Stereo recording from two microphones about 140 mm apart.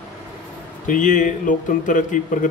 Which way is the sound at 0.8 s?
65° left (ahead or behind).